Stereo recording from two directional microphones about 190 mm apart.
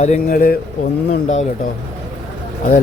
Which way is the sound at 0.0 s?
45° left (ahead or behind).